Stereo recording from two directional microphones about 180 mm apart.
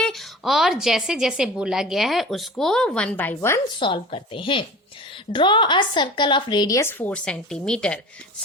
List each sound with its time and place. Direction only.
0.0 s speech: centre (ahead or behind)
3.8 s a woman's voice: 30° left (ahead or behind); by 8.0 s 5° left (ahead or behind)